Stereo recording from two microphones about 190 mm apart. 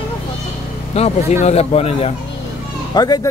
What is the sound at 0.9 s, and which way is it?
Speech, 35° left (ahead or behind).